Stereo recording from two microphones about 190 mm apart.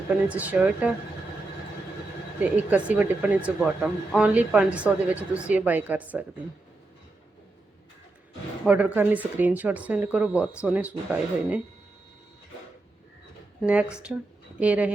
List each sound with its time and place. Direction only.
0.3 s speech: 10° right (ahead or behind)
2.4 s speech: 5° right (ahead or behind)
8.6 s speech: 10° right (ahead or behind)
13.6 s speech: 5° right (ahead or behind)